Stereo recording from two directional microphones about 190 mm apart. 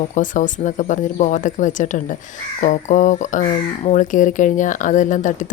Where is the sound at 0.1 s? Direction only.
40° left (ahead or behind).